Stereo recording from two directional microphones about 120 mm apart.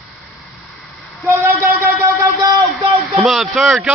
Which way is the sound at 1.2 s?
20° right (ahead or behind).